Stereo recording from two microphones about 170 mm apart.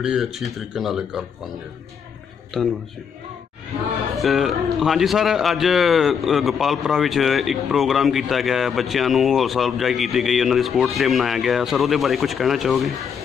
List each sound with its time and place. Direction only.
0.0 s a man's voice: 5° right (ahead or behind)
2.6 s a man's voice: centre (ahead or behind)
4.2 s a man's voice: centre (ahead or behind)